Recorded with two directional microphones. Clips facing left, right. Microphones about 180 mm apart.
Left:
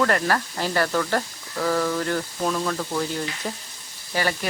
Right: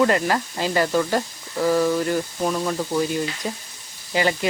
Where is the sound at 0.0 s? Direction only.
15° right (ahead or behind).